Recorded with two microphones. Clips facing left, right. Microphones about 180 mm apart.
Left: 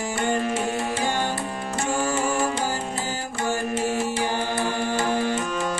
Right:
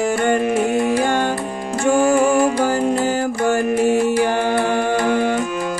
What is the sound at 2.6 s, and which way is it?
Music, 60° right (ahead or behind).